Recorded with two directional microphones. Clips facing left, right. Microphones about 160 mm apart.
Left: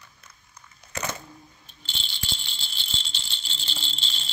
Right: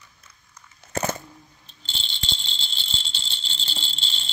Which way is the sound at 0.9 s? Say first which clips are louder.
Right 6 dB; 45° right (ahead or behind).